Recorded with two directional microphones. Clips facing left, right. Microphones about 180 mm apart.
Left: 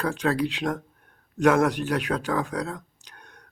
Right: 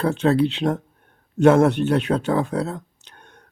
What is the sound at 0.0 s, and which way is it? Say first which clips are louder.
Speech: right 6 dB; 25° right (ahead or behind).